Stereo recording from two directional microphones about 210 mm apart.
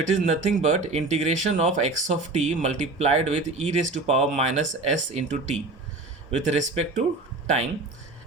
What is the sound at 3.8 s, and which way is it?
Speech, 35° right (ahead or behind).